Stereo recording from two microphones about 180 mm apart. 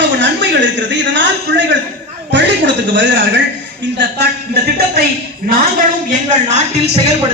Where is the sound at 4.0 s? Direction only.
65° right (ahead or behind).